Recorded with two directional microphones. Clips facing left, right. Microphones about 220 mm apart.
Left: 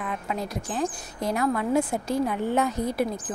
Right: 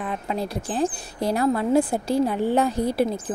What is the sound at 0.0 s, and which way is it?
A woman's voice, 30° right (ahead or behind).